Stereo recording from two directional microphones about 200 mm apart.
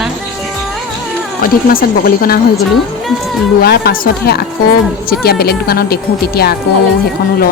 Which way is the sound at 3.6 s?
50° left (ahead or behind).